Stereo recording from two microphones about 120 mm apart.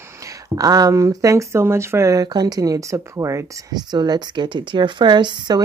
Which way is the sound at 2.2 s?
35° right (ahead or behind).